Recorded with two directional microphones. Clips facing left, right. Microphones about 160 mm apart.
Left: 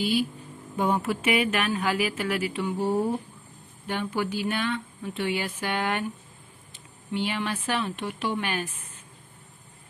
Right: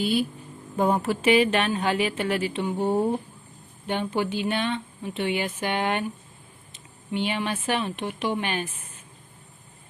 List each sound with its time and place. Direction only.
0.0 s speech: centre (ahead or behind)
0.7 s a woman's voice: 35° right (ahead or behind)